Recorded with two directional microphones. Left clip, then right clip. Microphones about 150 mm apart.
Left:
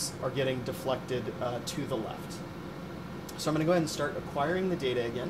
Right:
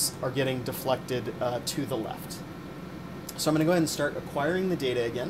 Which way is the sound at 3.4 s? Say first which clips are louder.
Right 3 dB; 40° right (ahead or behind).